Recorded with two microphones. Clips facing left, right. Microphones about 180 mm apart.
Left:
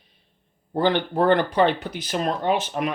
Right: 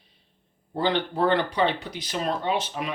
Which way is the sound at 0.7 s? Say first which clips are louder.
Left 4 dB; 50° left (ahead or behind).